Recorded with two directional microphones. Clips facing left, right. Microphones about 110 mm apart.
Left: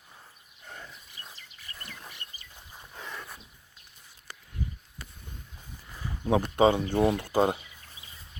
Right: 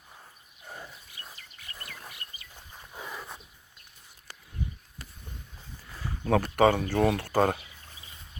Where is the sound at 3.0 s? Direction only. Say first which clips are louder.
Right 1 dB; 10° right (ahead or behind).